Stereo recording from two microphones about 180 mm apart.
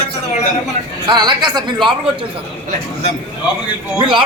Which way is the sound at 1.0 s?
25° right (ahead or behind).